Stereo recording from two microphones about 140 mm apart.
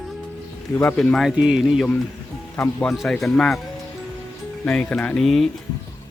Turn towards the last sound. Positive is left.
turn(degrees=0)  # may be behind; listen again after turning